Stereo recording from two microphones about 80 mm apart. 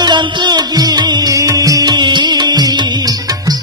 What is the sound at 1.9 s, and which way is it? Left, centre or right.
Music, right.